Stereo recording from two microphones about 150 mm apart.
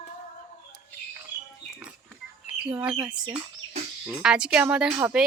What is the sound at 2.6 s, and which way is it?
Speech, 5° right (ahead or behind).